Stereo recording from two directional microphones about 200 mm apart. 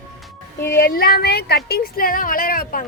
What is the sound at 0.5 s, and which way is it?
A woman's voice, 45° left (ahead or behind).